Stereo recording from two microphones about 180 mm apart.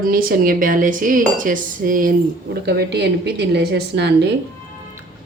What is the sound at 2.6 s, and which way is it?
A woman's voice, 65° right (ahead or behind).